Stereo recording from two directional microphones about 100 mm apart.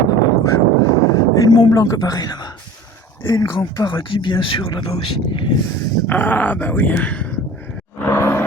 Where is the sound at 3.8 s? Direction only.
55° left (ahead or behind).